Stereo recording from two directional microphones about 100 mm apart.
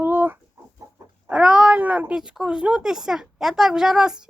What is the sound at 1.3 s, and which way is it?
Speech, 10° right (ahead or behind).